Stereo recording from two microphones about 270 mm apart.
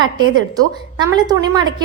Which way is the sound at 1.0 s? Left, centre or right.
Centre.